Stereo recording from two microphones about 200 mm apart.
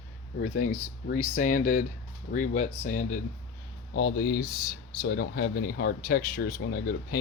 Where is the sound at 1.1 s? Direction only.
40° left (ahead or behind).